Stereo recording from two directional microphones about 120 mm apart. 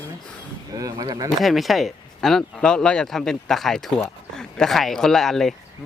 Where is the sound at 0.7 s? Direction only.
30° right (ahead or behind).